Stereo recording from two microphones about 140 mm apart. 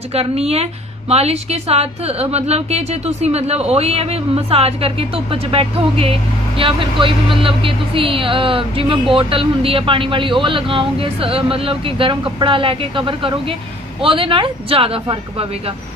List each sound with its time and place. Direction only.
0.1 s a woman's voice: 45° right (ahead or behind)